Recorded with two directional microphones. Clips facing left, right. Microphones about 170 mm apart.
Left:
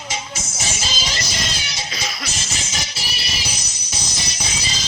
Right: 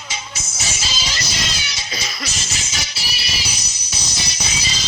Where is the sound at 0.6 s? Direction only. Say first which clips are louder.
Left 1 dB; 50° left (ahead or behind).